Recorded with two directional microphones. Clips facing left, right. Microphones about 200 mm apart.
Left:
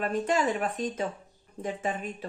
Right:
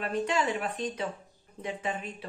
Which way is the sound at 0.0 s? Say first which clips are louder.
Left 2 dB; 45° left (ahead or behind).